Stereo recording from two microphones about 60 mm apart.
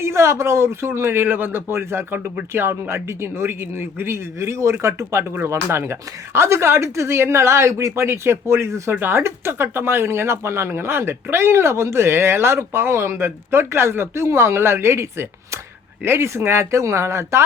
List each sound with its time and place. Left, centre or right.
0.0 s speech: right
8.0 s speech: right